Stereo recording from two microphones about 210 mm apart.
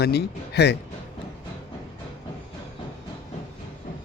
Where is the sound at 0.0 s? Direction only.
50° left (ahead or behind).